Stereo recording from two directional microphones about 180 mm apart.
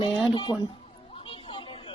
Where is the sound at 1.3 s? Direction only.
30° left (ahead or behind).